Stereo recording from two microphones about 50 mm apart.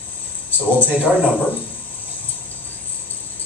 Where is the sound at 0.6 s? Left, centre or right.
Left.